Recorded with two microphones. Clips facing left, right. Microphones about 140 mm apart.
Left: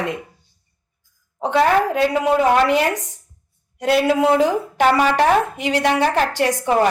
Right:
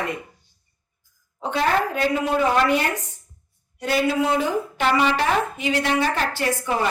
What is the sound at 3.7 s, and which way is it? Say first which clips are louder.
Speech: left 5 dB; 75° left (ahead or behind).